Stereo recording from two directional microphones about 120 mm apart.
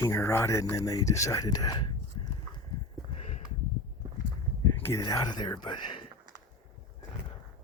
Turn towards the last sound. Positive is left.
turn(degrees=40)  # may be behind; listen again after turning